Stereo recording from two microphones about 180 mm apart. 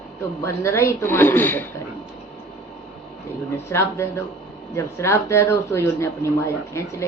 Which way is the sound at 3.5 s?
15° left (ahead or behind).